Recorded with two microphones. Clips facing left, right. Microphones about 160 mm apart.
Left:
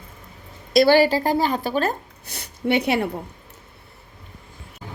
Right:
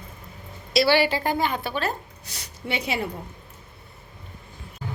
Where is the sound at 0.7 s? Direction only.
50° left (ahead or behind).